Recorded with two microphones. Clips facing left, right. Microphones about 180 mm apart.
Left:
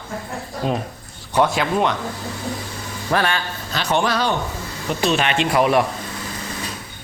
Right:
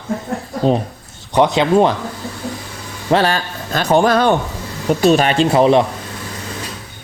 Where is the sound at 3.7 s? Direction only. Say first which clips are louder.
Right 7 dB; 45° right (ahead or behind).